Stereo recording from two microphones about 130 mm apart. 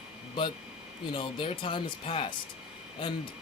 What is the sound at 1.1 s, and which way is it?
Speech, 40° left (ahead or behind).